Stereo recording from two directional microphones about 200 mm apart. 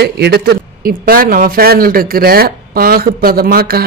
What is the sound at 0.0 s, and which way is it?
Speech, 55° right (ahead or behind).